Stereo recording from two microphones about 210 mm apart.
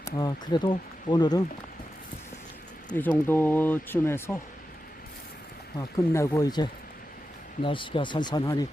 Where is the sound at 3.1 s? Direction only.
10° left (ahead or behind).